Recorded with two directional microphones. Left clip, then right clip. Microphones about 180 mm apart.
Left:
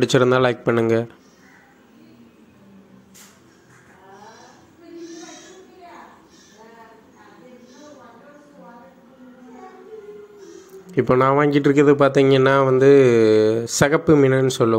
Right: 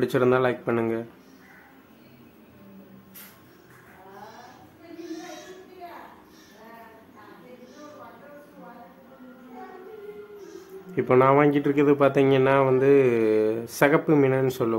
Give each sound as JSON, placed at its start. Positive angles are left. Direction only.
{"t": 0.0, "sound": "speech", "side_deg": 30}
{"t": 5.3, "sound": "a sound", "side_deg": 0}
{"t": 11.0, "sound": "speech", "side_deg": 30}